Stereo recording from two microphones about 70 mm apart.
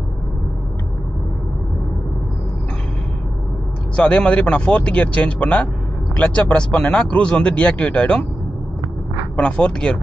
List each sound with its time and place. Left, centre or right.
3.9 s speech: centre
9.4 s speech: centre